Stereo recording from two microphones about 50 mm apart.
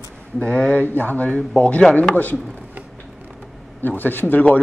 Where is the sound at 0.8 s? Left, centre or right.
Left.